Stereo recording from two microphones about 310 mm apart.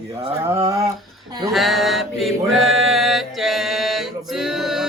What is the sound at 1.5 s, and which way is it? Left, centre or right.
Mantra, centre.